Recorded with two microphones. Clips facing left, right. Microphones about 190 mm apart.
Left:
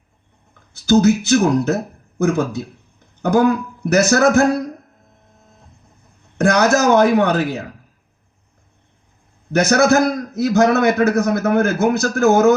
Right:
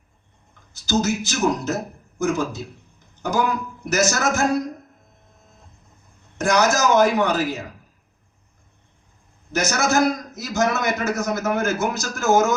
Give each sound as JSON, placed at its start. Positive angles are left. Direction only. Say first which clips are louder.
{"t": 0.7, "sound": "a man's voice", "louder": "left 9 dB", "side_deg": 60}
{"t": 6.3, "sound": "a man's voice", "louder": "left 5 dB", "side_deg": 60}
{"t": 9.5, "sound": "a man's voice", "louder": "left 8 dB", "side_deg": 60}